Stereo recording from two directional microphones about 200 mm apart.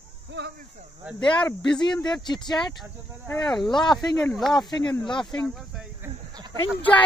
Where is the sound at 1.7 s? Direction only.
20° left (ahead or behind).